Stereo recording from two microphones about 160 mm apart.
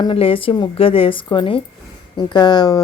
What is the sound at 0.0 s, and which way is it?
A woman's voice, 35° left (ahead or behind).